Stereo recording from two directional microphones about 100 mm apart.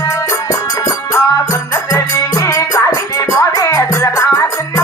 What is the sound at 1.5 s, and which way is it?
Music, 30° left (ahead or behind).